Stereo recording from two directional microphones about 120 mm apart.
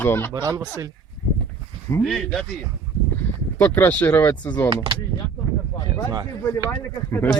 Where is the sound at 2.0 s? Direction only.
Centre (ahead or behind).